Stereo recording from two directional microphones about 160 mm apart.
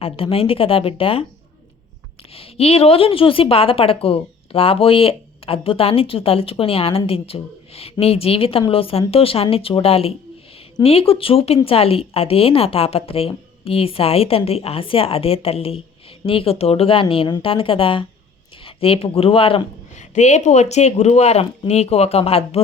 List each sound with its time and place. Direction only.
0.0 s speech: 35° left (ahead or behind)
2.3 s speech: 40° left (ahead or behind)
20.0 s speech: 50° left (ahead or behind)